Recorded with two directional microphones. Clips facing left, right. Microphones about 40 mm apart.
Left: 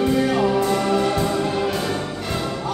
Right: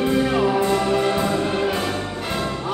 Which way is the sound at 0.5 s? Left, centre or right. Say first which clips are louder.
Even; right.